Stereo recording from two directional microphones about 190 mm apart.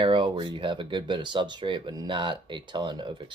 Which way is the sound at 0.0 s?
25° right (ahead or behind).